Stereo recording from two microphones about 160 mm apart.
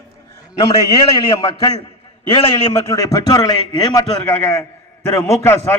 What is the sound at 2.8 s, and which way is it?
A man's voice, 20° left (ahead or behind).